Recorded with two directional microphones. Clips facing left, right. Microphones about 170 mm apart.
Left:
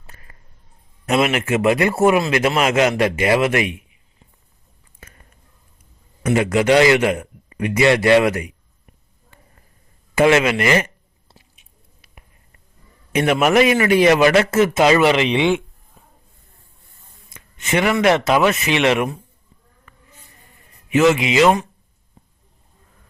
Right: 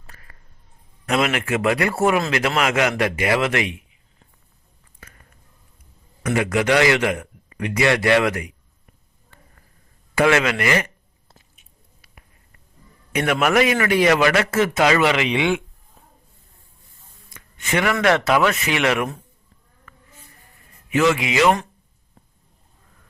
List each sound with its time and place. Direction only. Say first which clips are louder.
0.1 s a sound: left 1 dB; 20° left (ahead or behind)
1.0 s a man's voice: left 3 dB; 20° left (ahead or behind)
4.9 s whispering: left 1 dB; 25° left (ahead or behind)
6.2 s a man's voice: left 4 dB; 25° left (ahead or behind)
10.2 s a man's voice: left 3 dB; 20° left (ahead or behind)
13.1 s a man's voice: left 3 dB; 25° left (ahead or behind)
17.3 s a man's voice: left 3 dB; 20° left (ahead or behind)
20.9 s a man's voice: left 4 dB; 20° left (ahead or behind)